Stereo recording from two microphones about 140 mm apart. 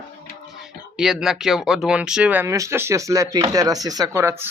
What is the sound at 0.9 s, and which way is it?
Speech, 5° right (ahead or behind).